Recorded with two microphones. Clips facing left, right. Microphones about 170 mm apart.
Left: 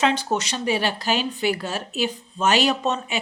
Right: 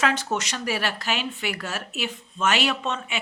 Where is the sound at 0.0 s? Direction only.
30° left (ahead or behind).